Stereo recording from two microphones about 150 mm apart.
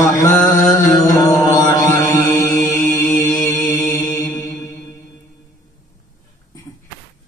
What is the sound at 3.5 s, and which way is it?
Mantra, 20° left (ahead or behind).